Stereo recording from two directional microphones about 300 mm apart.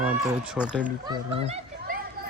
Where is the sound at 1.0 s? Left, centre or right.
Centre.